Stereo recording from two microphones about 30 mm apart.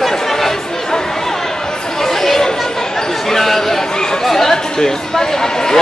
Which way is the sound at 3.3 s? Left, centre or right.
Centre.